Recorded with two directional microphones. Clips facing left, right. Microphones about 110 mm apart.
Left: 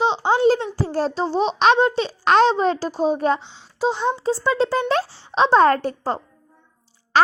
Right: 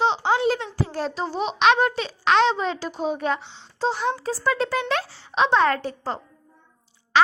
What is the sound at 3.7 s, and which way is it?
Speech, 15° left (ahead or behind).